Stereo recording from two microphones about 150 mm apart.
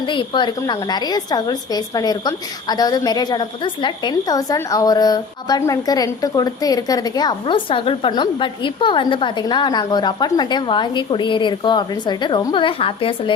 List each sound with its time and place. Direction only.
0.0 s a woman's voice: 30° left (ahead or behind)